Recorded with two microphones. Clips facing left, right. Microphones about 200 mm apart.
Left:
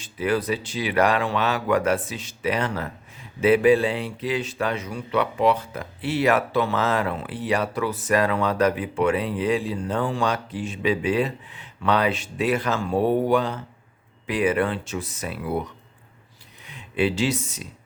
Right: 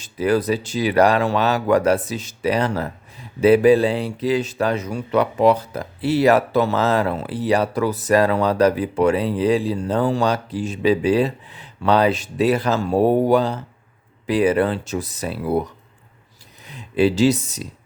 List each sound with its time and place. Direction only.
0.0 s speech: 40° right (ahead or behind)
16.6 s speech: 35° right (ahead or behind)